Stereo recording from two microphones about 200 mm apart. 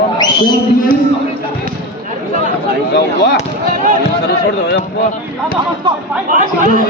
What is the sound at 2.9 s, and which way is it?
Speech, 55° left (ahead or behind).